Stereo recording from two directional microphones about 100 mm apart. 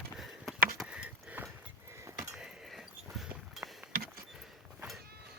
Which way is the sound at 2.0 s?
30° right (ahead or behind).